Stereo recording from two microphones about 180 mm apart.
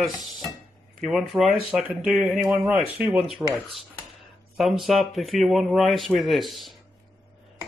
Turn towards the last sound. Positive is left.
turn(degrees=0)  # may be behind; listen again after turning